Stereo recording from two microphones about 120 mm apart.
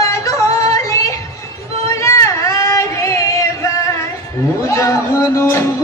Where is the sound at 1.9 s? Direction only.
25° left (ahead or behind).